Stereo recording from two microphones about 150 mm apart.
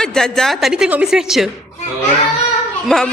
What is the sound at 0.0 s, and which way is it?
A woman's voice, 5° left (ahead or behind).